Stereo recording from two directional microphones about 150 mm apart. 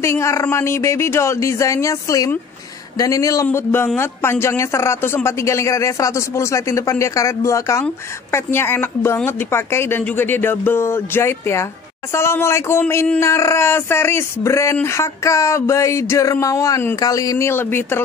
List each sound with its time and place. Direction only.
0.0 s speech: 20° left (ahead or behind)